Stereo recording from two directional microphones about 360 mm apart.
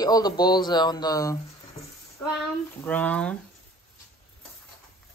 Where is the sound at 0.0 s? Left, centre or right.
Centre.